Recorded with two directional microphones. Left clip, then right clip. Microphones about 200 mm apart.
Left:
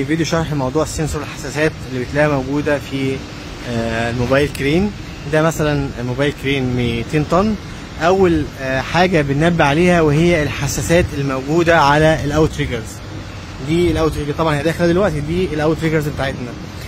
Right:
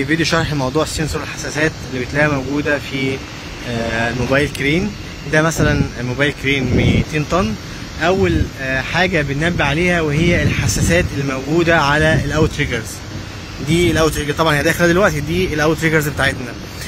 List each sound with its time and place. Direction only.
0.1 s speech: 15° left (ahead or behind)
0.6 s speech: centre (ahead or behind)
1.6 s speech: 20° left (ahead or behind)
13.7 s speech: centre (ahead or behind)